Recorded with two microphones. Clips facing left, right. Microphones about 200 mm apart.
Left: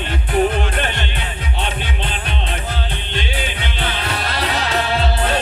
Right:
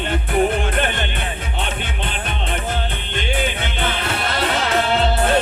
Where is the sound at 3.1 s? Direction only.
50° right (ahead or behind).